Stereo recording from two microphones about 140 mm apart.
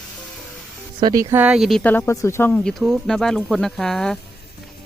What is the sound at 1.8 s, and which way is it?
Speech, 15° left (ahead or behind).